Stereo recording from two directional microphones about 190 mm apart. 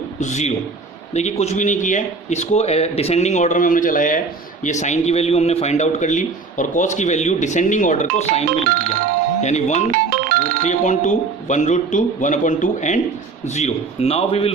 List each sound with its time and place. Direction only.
0.2 s a man's voice: 40° left (ahead or behind)
10.1 s music: 50° right (ahead or behind)
10.6 s a man's voice: 40° left (ahead or behind)